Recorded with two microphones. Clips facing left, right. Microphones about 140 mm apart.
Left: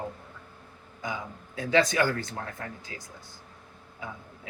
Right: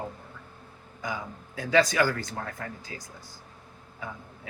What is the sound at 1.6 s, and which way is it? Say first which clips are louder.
Speech: right 1 dB; 25° left (ahead or behind).